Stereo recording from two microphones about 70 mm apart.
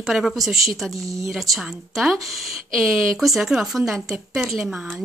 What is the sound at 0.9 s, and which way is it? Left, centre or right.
Speech, right.